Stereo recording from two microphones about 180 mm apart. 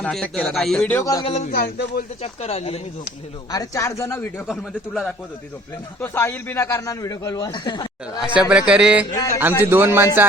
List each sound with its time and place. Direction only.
0.0 s speech: 5° left (ahead or behind)
0.9 s a man's voice: 20° left (ahead or behind)
1.2 s speech: 35° left (ahead or behind)
1.5 s a man's voice: 55° left (ahead or behind)
2.2 s speech: 35° left (ahead or behind)
3.5 s speech: 20° left (ahead or behind)
4.4 s speech: centre (ahead or behind)
6.0 s a man's voice: 10° left (ahead or behind)
8.4 s speech: 5° right (ahead or behind)
9.0 s a man's voice: 20° left (ahead or behind)
9.6 s speech: 10° right (ahead or behind)